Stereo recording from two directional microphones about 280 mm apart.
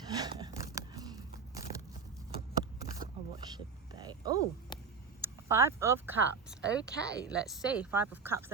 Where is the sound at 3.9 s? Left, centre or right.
Centre.